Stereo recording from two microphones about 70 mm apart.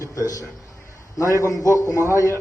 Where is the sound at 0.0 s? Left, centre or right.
Left.